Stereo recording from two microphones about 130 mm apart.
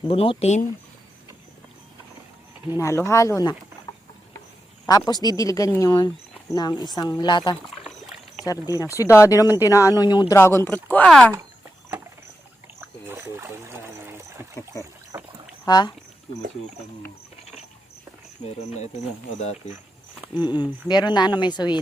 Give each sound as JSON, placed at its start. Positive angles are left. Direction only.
{"t": 0.1, "sound": "speech", "side_deg": 45}
{"t": 2.7, "sound": "speech", "side_deg": 25}
{"t": 4.9, "sound": "speech", "side_deg": 30}
{"t": 8.4, "sound": "speech", "side_deg": 25}
{"t": 10.3, "sound": "speech", "side_deg": 20}
{"t": 10.9, "sound": "speech", "side_deg": 10}
{"t": 13.1, "sound": "trickle", "side_deg": -20}
{"t": 15.1, "sound": "boat", "side_deg": -25}
{"t": 15.6, "sound": "speech", "side_deg": 35}
{"t": 19.4, "sound": "cricket", "side_deg": 60}
{"t": 20.3, "sound": "speech", "side_deg": 35}